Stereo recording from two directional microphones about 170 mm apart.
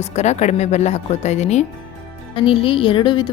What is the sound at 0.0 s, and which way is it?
Speech, 40° left (ahead or behind).